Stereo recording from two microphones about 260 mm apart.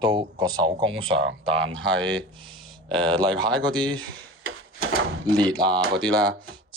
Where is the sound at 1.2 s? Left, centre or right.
Right.